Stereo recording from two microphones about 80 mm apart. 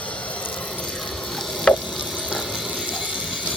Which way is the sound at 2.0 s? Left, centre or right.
Centre.